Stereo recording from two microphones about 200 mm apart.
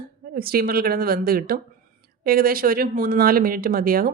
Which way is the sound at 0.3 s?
50° right (ahead or behind).